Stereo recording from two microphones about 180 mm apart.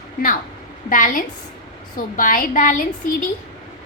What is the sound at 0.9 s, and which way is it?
A woman's voice, 50° left (ahead or behind).